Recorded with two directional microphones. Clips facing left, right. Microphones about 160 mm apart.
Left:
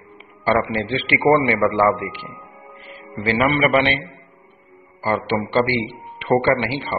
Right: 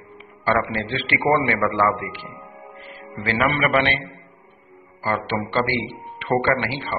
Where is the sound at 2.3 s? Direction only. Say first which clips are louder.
Right 1 dB; 20° right (ahead or behind).